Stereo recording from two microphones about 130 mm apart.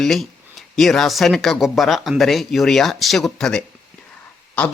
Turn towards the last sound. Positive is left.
turn(degrees=10)  # may be behind; listen again after turning